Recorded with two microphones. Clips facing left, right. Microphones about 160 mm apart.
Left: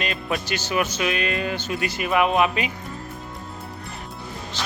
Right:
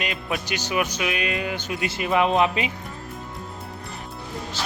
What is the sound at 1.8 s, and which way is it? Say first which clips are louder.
Speech: even; 25° right (ahead or behind).